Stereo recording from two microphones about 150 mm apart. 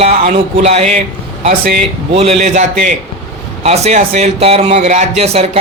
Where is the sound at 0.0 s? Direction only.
40° right (ahead or behind).